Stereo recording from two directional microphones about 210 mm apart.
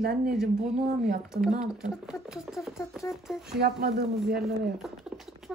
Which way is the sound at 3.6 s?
50° right (ahead or behind).